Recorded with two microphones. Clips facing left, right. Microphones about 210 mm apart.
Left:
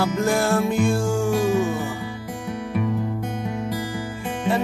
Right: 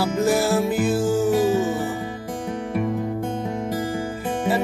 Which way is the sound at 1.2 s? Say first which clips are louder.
Left 1 dB; 20° right (ahead or behind).